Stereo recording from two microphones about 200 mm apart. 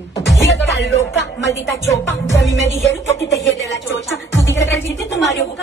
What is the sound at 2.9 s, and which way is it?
Speech, 65° left (ahead or behind).